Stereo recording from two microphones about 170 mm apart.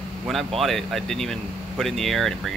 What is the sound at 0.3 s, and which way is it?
Speech, centre (ahead or behind).